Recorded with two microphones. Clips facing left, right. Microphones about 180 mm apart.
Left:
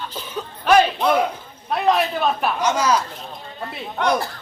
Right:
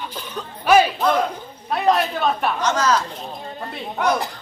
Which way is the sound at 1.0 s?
10° left (ahead or behind).